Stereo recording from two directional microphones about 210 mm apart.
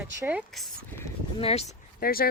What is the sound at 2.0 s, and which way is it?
Speech, 45° left (ahead or behind).